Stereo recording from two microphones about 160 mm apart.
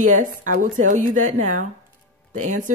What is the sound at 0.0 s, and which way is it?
Speech, 55° right (ahead or behind).